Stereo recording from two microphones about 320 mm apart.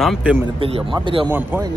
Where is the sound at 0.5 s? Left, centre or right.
Centre.